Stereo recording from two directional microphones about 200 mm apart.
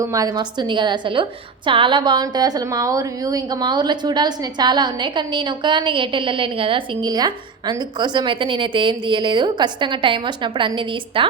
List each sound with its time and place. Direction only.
0.0 s a woman's voice: 15° right (ahead or behind)